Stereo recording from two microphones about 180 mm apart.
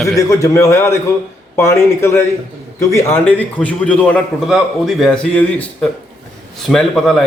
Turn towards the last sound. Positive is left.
turn(degrees=0)  # may be behind; listen again after turning